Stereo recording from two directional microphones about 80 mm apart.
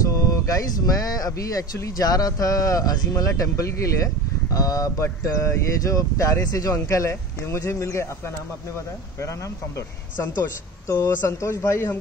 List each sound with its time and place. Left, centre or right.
0.0 s speech: left
5.0 s speech: left
10.9 s speech: left